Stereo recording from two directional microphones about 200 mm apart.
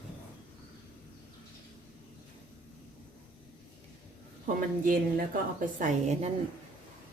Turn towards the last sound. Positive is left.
turn(degrees=-35)  # may be behind; listen again after turning